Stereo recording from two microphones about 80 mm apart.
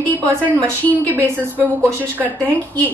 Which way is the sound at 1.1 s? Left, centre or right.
Right.